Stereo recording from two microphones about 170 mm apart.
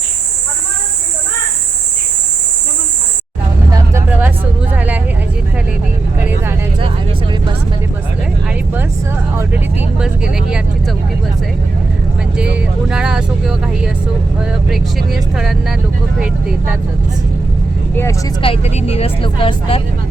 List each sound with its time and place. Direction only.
3.9 s vehicle: 10° right (ahead or behind)
9.3 s speech: 15° right (ahead or behind)
12.4 s speech: 5° right (ahead or behind)
18.4 s speech: 35° left (ahead or behind)